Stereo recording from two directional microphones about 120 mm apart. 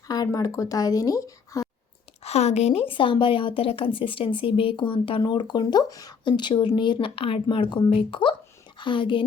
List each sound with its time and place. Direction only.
0.1 s speech: 30° left (ahead or behind)
2.2 s a woman's voice: 65° left (ahead or behind); by 9.2 s 45° left (ahead or behind)